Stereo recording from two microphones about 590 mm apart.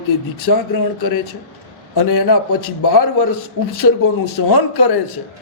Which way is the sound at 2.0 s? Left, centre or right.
Left.